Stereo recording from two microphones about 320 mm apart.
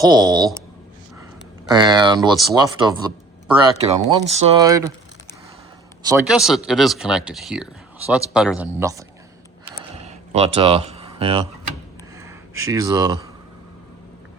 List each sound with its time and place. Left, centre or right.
0.0 s speech: centre
1.6 s speech: centre
6.1 s speech: centre
9.9 s a sound: centre